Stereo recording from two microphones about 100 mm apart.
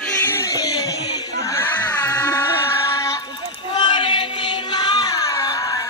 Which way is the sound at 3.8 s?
55° left (ahead or behind).